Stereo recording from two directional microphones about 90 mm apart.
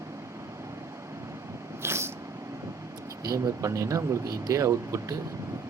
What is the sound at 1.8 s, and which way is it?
Cat, 30° right (ahead or behind).